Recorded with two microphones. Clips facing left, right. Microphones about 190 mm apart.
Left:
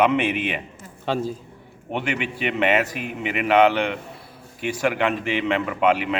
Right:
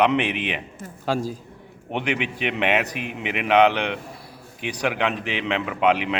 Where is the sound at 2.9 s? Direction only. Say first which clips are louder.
Left 1 dB; 45° left (ahead or behind).